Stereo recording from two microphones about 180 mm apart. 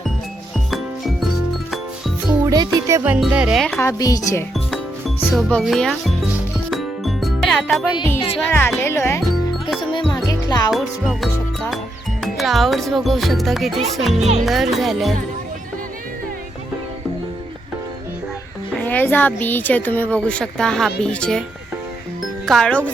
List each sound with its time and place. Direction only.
1.7 s music: centre (ahead or behind)
2.4 s speech: 20° right (ahead or behind); by 3.8 s centre (ahead or behind)
3.8 s a woman's voice: 15° left (ahead or behind)
4.5 s music: centre (ahead or behind)
8.4 s a woman's voice: 10° left (ahead or behind)
9.9 s music: 25° left (ahead or behind)
10.7 s music: centre (ahead or behind)
18.8 s a woman's voice: 10° left (ahead or behind)
21.0 s music: 5° left (ahead or behind)
22.4 s music: 5° left (ahead or behind)